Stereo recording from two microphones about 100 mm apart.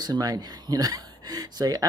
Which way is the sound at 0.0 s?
40° right (ahead or behind).